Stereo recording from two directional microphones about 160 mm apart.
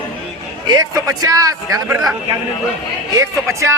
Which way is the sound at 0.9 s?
20° right (ahead or behind).